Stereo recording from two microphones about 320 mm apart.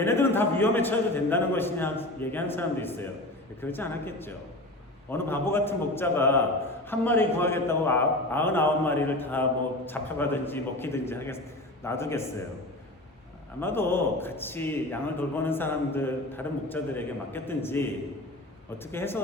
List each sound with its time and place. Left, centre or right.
0.0 s a man's voice: centre
13.6 s a man's voice: centre